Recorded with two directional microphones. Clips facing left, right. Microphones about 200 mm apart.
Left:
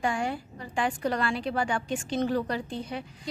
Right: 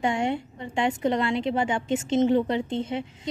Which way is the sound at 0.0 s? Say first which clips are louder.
Right 4 dB; 25° right (ahead or behind).